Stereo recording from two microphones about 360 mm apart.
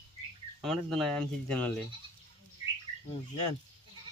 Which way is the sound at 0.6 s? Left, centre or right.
Centre.